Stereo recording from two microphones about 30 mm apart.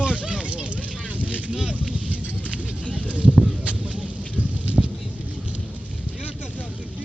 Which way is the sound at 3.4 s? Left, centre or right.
Right.